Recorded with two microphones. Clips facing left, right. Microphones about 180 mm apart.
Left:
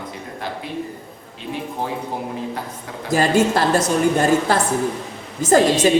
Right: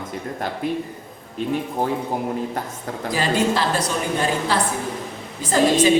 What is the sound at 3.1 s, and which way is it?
A woman's voice, 45° left (ahead or behind).